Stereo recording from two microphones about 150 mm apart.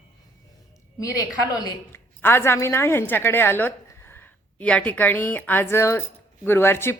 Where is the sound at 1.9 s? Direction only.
15° left (ahead or behind).